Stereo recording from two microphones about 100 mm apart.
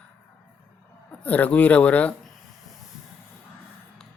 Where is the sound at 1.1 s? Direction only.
15° left (ahead or behind).